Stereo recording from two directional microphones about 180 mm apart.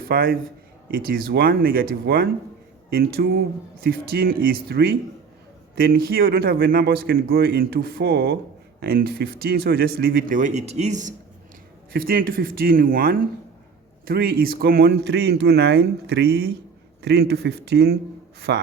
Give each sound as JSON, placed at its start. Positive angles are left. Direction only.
{"t": 0.0, "sound": "a man's voice", "side_deg": -55}
{"t": 11.9, "sound": "a man's voice", "side_deg": -55}